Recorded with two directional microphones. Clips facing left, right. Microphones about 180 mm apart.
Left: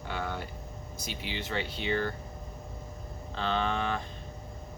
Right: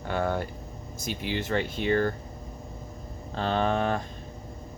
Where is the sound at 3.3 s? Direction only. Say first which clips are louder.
Right 5 dB; 45° right (ahead or behind).